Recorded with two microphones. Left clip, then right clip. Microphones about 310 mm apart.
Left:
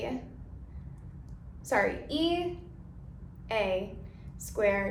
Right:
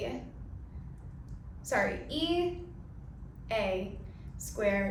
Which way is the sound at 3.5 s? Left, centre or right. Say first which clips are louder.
Left 2 dB; left.